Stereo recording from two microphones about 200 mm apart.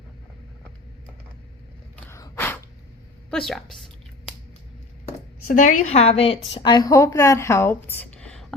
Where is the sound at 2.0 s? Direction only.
15° left (ahead or behind).